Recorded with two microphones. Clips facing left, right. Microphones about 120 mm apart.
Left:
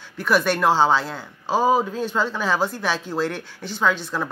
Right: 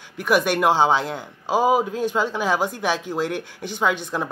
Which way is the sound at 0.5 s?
15° right (ahead or behind).